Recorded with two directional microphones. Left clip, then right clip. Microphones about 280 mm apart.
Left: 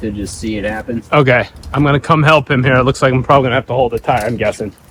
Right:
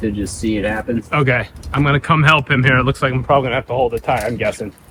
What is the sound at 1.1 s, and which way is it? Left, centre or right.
Speech, centre.